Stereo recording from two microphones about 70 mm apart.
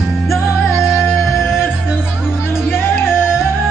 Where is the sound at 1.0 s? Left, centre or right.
Left.